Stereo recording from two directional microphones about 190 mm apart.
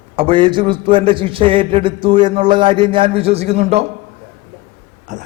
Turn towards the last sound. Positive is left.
turn(degrees=-40)  # may be behind; listen again after turning